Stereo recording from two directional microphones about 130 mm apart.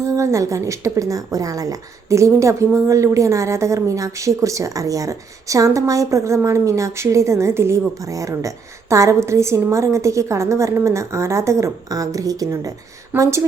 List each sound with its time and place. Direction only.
0.0 s a woman's voice: 25° right (ahead or behind)
13.1 s speech: 15° right (ahead or behind)